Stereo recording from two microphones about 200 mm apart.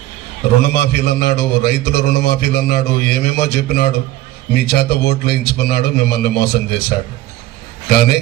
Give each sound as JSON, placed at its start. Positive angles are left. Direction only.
{"t": 0.6, "sound": "a man's voice", "side_deg": 55}